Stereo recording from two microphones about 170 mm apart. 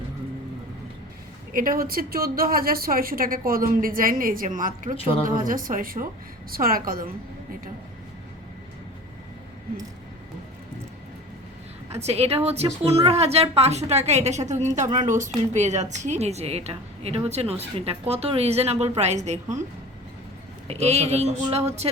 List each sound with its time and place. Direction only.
1.5 s a woman's voice: 55° right (ahead or behind)
12.0 s a woman's voice: 40° right (ahead or behind)
20.7 s a woman's voice: 40° right (ahead or behind)